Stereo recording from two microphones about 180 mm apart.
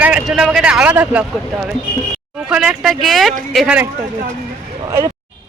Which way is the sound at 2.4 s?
5° right (ahead or behind).